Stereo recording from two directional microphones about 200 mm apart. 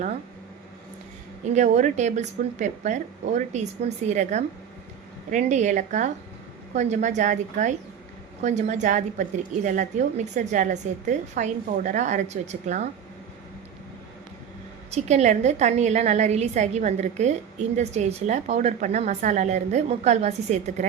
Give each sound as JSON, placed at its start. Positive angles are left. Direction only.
{"t": 1.5, "sound": "a woman's voice", "side_deg": -35}
{"t": 14.8, "sound": "a woman's voice", "side_deg": -35}